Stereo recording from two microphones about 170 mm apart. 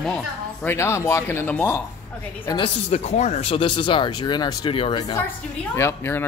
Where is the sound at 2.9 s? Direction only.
40° left (ahead or behind).